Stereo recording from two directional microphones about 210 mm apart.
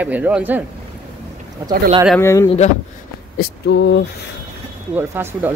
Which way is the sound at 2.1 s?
10° left (ahead or behind).